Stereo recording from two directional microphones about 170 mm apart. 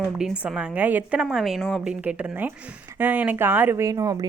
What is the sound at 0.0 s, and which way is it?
A woman's voice, centre (ahead or behind).